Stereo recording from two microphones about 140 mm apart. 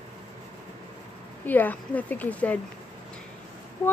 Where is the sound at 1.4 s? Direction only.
15° left (ahead or behind).